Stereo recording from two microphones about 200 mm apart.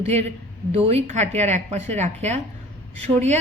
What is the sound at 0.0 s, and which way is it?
Speech, 30° right (ahead or behind).